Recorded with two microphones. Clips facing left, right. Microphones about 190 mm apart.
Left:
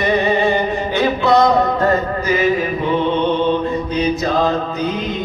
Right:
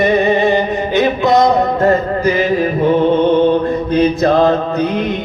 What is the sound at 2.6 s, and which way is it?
Mantra, 45° right (ahead or behind).